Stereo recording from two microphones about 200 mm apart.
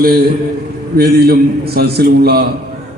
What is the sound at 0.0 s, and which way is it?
A man's voice, 50° right (ahead or behind).